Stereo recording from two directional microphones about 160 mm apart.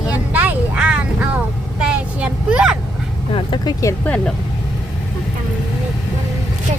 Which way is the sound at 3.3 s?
30° left (ahead or behind).